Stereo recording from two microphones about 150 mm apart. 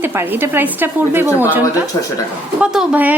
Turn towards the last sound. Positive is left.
turn(degrees=-10)  # may be behind; listen again after turning